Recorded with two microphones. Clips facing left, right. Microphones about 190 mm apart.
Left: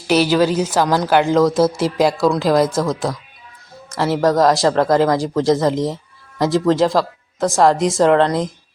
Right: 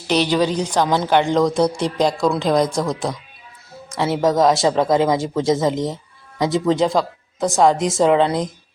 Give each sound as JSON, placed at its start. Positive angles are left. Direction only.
{"t": 0.1, "sound": "speech", "side_deg": 5}